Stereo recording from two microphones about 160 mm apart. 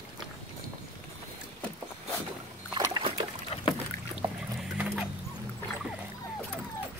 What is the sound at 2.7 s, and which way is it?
Boat, 30° right (ahead or behind).